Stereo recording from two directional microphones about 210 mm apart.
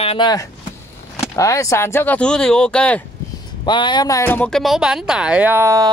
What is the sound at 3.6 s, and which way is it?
Speech, 20° left (ahead or behind).